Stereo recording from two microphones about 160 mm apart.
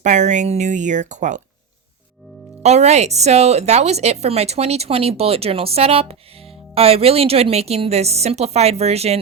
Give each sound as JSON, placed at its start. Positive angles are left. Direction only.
{"t": 0.0, "sound": "speech", "side_deg": -50}
{"t": 2.6, "sound": "speech", "side_deg": -45}